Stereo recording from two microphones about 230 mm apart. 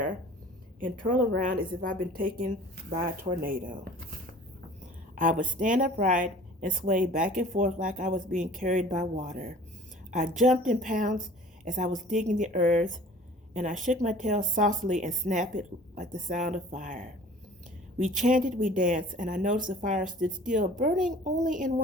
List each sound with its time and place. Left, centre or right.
0.8 s speech: right
5.1 s speech: right
20.1 s speech: centre
20.4 s speech: right